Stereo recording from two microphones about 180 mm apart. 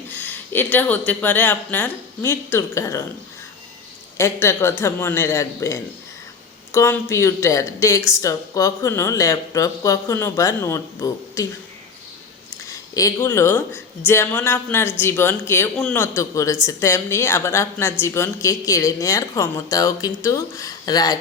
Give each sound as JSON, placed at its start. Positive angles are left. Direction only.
{"t": 0.1, "sound": "speech", "side_deg": 10}
{"t": 4.2, "sound": "speech", "side_deg": 15}
{"t": 12.6, "sound": "speech", "side_deg": 20}